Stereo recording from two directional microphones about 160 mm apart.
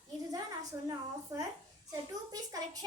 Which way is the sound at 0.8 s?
20° right (ahead or behind).